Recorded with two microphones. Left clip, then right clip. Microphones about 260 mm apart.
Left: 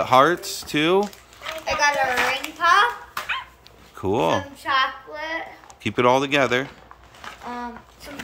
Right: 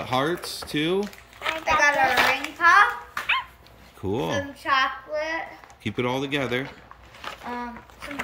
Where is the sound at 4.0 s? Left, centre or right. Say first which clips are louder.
Left 6 dB; centre.